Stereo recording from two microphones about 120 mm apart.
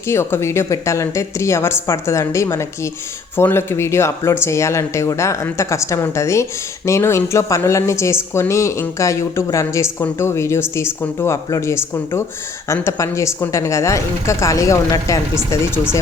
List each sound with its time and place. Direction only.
0.1 s speech: 20° left (ahead or behind)